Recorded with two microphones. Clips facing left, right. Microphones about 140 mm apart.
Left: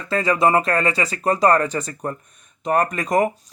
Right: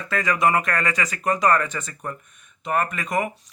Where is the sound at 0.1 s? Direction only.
30° left (ahead or behind).